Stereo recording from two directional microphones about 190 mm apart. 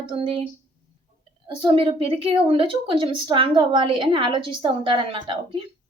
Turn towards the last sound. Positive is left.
turn(degrees=-25)  # may be behind; listen again after turning